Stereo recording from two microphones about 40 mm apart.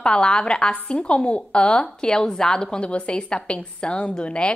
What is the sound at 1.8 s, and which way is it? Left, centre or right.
Speech, centre.